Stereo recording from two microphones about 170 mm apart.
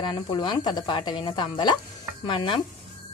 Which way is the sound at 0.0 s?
25° left (ahead or behind).